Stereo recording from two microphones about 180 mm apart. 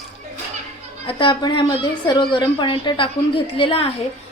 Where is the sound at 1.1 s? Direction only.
25° left (ahead or behind).